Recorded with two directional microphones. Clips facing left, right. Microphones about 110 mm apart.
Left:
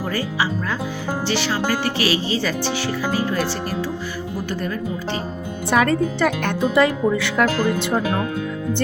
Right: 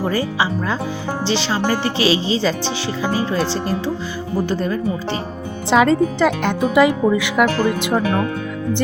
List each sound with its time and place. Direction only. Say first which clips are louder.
0.1 s speech: right 3 dB; 25° right (ahead or behind)
5.7 s speech: right 4 dB; 20° right (ahead or behind)